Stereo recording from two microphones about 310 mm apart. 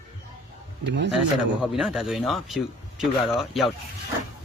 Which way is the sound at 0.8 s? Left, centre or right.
Right.